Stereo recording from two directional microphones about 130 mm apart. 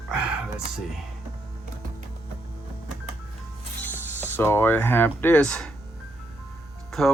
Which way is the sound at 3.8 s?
15° left (ahead or behind).